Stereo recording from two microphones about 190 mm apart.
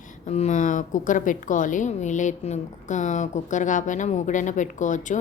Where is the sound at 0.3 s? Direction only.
35° left (ahead or behind).